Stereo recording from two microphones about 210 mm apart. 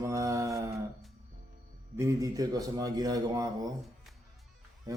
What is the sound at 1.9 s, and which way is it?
Speech, 15° right (ahead or behind).